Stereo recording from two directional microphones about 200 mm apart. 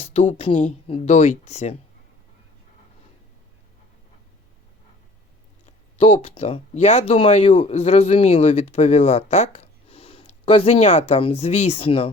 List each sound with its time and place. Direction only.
0.0 s speech: 35° left (ahead or behind)
5.6 s speech: 30° left (ahead or behind)